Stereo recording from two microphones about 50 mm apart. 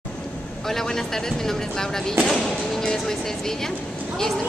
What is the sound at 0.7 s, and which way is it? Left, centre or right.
A woman's voice, centre.